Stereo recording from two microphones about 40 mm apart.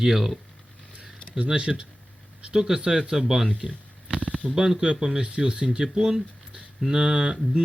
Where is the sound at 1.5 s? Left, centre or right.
Right.